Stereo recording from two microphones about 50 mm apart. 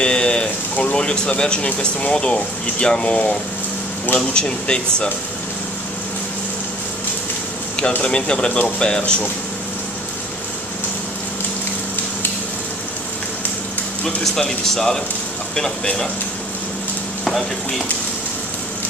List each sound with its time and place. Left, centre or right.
0.0 s a sound: centre
0.9 s speech: centre
8.0 s speech: centre
14.0 s speech: centre
17.2 s speech: centre